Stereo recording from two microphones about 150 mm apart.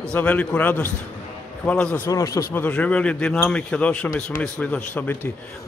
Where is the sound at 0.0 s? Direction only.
10° left (ahead or behind).